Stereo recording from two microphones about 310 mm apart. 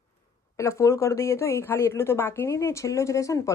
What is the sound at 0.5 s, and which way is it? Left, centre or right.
A woman's voice, centre.